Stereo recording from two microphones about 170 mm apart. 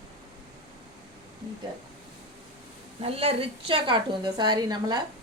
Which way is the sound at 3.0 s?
35° right (ahead or behind).